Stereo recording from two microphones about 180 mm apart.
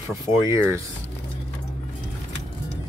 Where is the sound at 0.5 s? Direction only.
15° right (ahead or behind).